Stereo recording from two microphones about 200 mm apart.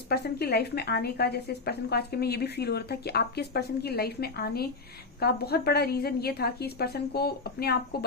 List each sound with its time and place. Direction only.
0.1 s a woman's voice: 55° left (ahead or behind)